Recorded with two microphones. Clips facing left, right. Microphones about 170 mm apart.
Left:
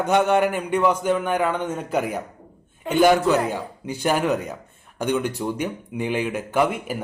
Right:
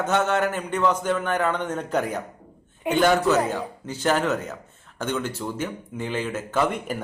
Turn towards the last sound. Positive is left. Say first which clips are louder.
# left 2 dB
turn(degrees=10)  # may be behind; listen again after turning